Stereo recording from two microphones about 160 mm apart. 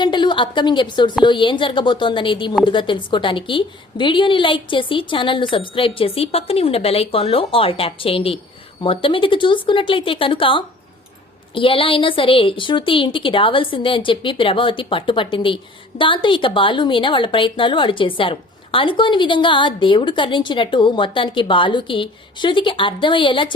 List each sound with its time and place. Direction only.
0.0 s a woman's voice: 30° left (ahead or behind)